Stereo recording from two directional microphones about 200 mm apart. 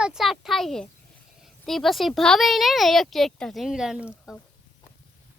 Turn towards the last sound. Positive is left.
turn(degrees=-5)  # may be behind; listen again after turning